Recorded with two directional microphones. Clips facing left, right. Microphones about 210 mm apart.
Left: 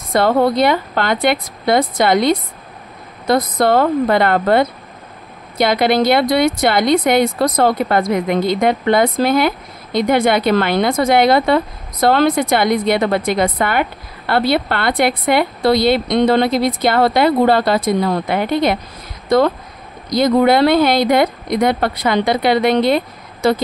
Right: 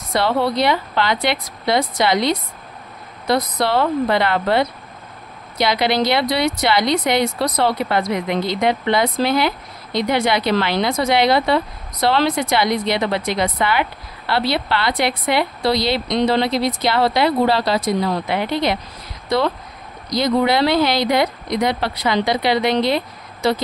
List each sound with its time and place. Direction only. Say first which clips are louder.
0.1 s speech: left 5 dB; 50° left (ahead or behind)